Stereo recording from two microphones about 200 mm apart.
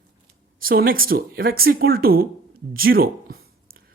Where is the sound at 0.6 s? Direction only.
45° right (ahead or behind).